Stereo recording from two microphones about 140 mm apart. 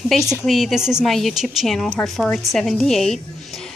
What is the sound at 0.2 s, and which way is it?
Speech, 20° left (ahead or behind).